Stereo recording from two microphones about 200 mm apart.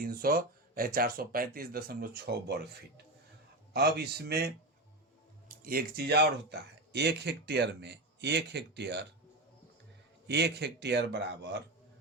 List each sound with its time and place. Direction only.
0.0 s speech: 45° right (ahead or behind)
3.7 s speech: 55° right (ahead or behind)
10.2 s speech: 55° right (ahead or behind)